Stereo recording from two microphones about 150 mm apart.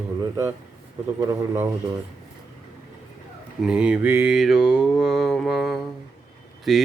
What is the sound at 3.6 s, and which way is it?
Mantra, 5° right (ahead or behind).